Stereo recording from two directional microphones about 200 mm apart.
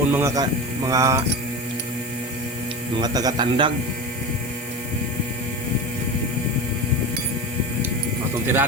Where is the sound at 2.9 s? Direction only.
20° right (ahead or behind).